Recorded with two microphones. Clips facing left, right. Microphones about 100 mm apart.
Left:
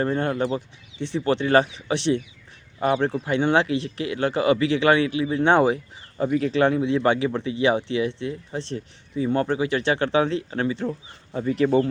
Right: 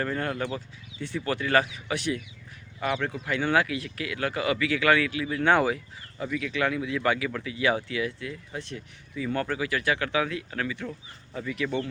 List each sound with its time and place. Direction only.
0.0 s speech: 25° left (ahead or behind)
6.2 s speech: 40° left (ahead or behind)